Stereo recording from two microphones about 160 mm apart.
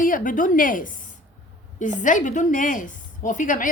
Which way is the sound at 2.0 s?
55° left (ahead or behind).